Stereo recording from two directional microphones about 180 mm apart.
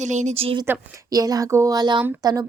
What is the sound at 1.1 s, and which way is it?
Speech, 20° right (ahead or behind).